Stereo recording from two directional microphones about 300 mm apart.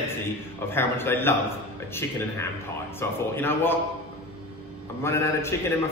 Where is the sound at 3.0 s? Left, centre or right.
Centre.